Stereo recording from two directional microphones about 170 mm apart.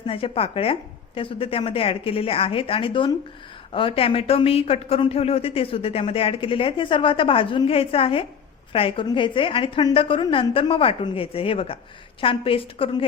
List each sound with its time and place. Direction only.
0.1 s speech: 35° left (ahead or behind)